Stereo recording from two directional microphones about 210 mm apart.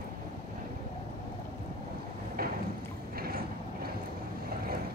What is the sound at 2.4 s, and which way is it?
Boat, 45° right (ahead or behind).